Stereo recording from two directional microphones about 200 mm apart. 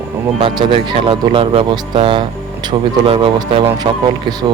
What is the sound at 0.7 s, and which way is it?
Speech, 25° right (ahead or behind).